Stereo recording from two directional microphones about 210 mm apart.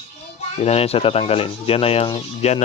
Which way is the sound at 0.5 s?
30° left (ahead or behind).